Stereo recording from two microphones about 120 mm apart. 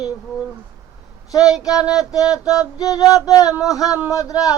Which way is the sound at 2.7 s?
30° left (ahead or behind).